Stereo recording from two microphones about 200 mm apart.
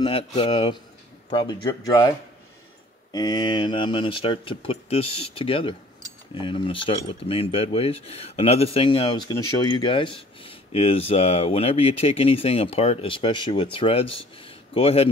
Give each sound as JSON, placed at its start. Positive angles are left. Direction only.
{"t": 0.0, "sound": "a man's voice", "side_deg": 25}